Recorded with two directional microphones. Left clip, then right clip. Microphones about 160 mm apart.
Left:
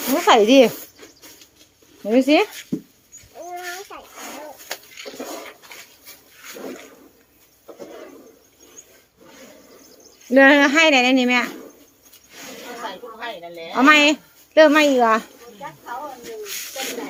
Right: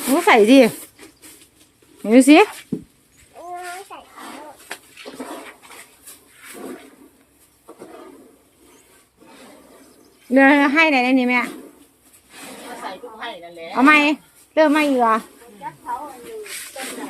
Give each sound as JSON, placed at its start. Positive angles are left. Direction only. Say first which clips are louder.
{"t": 0.1, "sound": "speech", "louder": "right 1 dB", "side_deg": -20}
{"t": 2.0, "sound": "speech", "louder": "right 5 dB", "side_deg": -40}
{"t": 2.7, "sound": "dog", "louder": "left 1 dB", "side_deg": 15}
{"t": 10.2, "sound": "speech", "louder": "left 1 dB", "side_deg": 0}
{"t": 13.7, "sound": "speech", "louder": "even", "side_deg": 0}